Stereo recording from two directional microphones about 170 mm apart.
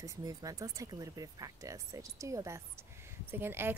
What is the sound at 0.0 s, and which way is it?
Speech, 20° right (ahead or behind).